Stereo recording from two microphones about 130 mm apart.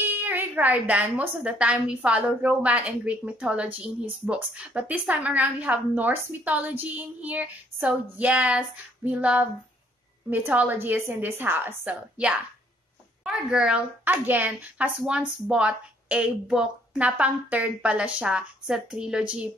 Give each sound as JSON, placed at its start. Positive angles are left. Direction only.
{"t": 0.0, "sound": "a child's voice", "side_deg": -15}